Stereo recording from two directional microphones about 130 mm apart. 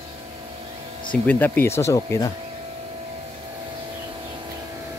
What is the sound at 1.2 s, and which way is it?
Speech, 15° left (ahead or behind).